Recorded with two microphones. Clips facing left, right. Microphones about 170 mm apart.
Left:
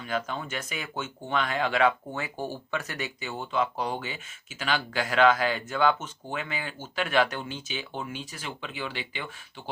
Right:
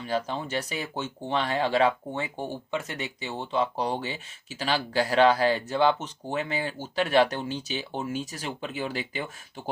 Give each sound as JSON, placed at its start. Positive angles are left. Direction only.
{"t": 0.0, "sound": "speech", "side_deg": -30}